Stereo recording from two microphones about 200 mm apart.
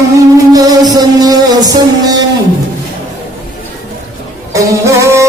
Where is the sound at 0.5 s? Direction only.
20° right (ahead or behind).